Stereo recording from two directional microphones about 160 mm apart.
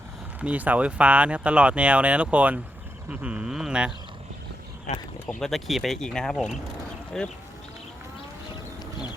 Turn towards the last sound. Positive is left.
turn(degrees=0)  # may be behind; listen again after turning